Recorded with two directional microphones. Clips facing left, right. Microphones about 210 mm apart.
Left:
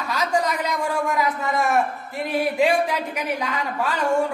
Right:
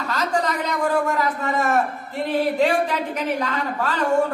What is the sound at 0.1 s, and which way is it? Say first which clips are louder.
Speech: left 1 dB; 10° left (ahead or behind).